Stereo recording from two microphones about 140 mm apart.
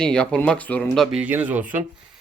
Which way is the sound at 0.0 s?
5° left (ahead or behind).